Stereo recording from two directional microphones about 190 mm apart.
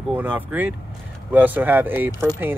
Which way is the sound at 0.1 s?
10° right (ahead or behind).